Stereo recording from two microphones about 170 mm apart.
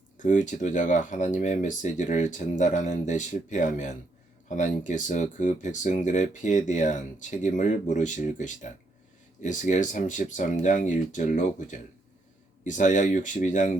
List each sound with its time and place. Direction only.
0.2 s speech: 45° left (ahead or behind)